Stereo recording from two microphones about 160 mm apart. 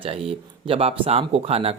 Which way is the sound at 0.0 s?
35° right (ahead or behind).